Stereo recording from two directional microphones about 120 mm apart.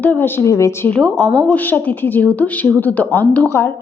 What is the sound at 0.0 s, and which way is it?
Speech, 15° left (ahead or behind).